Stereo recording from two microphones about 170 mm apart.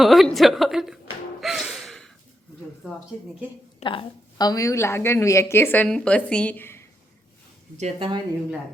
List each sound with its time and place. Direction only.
0.0 s a woman's voice: centre (ahead or behind)
1.4 s gasp: centre (ahead or behind)
3.8 s a woman's voice: 30° left (ahead or behind); by 6.8 s 15° left (ahead or behind)
7.8 s speech: 35° right (ahead or behind)